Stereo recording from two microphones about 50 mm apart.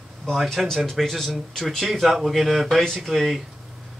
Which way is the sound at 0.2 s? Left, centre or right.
Centre.